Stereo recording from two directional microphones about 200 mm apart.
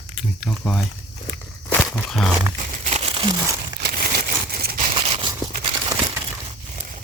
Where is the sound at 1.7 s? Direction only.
5° left (ahead or behind).